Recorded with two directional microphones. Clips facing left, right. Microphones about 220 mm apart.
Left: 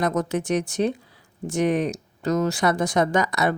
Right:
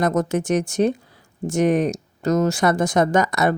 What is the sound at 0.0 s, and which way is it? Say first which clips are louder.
Speech: right 3 dB; 45° right (ahead or behind).